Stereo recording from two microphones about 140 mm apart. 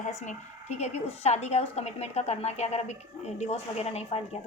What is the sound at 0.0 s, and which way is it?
A woman's voice, 55° left (ahead or behind).